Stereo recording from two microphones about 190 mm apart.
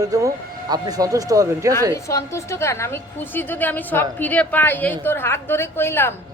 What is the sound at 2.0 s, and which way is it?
A woman's voice, 15° left (ahead or behind).